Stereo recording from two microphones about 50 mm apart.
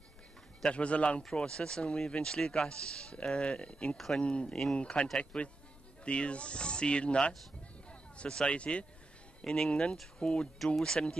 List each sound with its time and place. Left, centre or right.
0.7 s speech: left
1.2 s speech: centre
3.9 s speech: centre
4.2 s speech: left
9.4 s speech: centre